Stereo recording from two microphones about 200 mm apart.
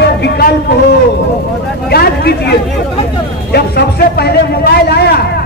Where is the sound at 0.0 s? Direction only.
55° left (ahead or behind).